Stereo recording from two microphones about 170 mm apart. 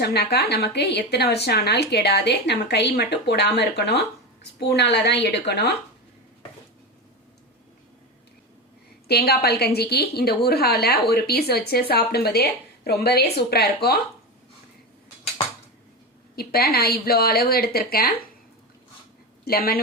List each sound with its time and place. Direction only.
0.0 s speech: 70° left (ahead or behind); by 5.7 s 90° left
9.0 s speech: 70° left (ahead or behind)
16.3 s speech: 65° left (ahead or behind)
19.5 s speech: 60° left (ahead or behind)